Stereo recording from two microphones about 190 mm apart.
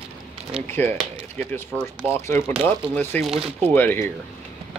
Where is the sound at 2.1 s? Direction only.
15° left (ahead or behind).